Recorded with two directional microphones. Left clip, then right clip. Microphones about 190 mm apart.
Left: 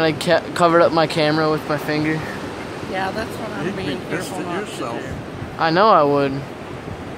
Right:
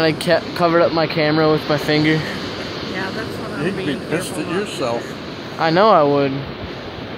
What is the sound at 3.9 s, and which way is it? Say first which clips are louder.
Speech: right 3 dB; 40° right (ahead or behind).